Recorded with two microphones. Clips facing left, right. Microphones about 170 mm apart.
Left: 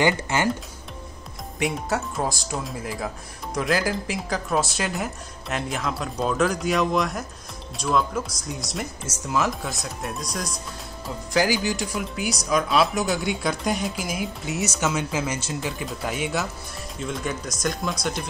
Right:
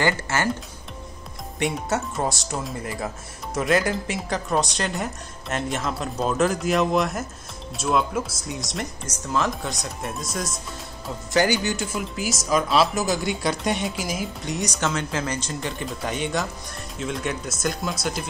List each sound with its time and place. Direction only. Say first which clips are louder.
0.0 s speech: left 2 dB; 15° left (ahead or behind)
1.6 s speech: right 1 dB; centre (ahead or behind)